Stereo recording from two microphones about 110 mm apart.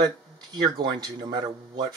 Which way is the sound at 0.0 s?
40° right (ahead or behind).